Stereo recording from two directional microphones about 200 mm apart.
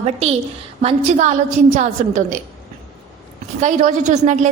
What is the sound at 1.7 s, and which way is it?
Speech, 40° right (ahead or behind).